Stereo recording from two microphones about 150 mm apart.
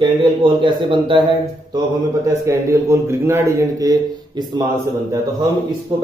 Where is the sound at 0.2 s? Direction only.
30° right (ahead or behind).